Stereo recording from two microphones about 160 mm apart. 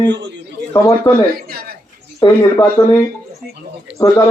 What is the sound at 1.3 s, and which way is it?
Speech, 70° right (ahead or behind).